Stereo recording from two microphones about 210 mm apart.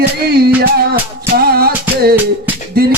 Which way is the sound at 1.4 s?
45° right (ahead or behind).